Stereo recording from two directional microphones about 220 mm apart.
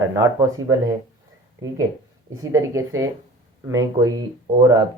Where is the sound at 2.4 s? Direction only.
15° right (ahead or behind).